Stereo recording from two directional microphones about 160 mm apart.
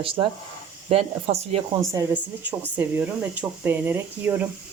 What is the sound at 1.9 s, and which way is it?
Speech, 20° right (ahead or behind).